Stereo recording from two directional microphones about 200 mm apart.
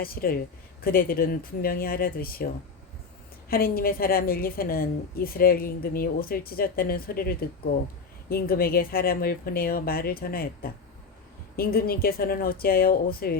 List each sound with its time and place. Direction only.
0.0 s a woman's voice: 50° left (ahead or behind)
3.5 s a woman's voice: 50° left (ahead or behind)